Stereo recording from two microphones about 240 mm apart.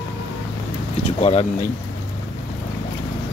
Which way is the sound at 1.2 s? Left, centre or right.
Left.